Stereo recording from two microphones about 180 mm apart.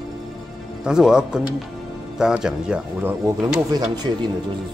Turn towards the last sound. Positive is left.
turn(degrees=-25)  # may be behind; listen again after turning